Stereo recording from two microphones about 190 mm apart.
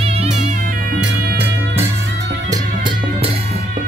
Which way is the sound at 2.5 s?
25° right (ahead or behind).